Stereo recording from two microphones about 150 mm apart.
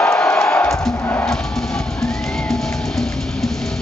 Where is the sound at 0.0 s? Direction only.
10° left (ahead or behind).